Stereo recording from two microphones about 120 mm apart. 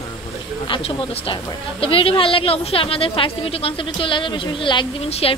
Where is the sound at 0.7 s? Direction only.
45° left (ahead or behind).